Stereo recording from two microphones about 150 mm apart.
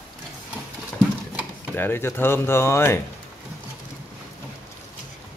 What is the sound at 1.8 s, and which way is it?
Speech, 15° left (ahead or behind).